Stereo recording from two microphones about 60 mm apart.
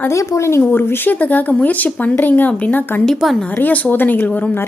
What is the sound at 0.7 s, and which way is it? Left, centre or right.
Speech, left.